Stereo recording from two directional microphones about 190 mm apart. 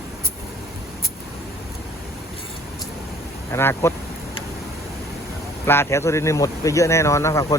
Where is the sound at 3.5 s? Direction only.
15° left (ahead or behind).